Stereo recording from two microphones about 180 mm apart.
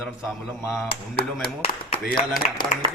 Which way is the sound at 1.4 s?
30° left (ahead or behind).